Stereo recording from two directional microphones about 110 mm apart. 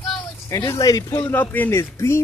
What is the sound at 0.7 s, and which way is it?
Speech, 30° left (ahead or behind).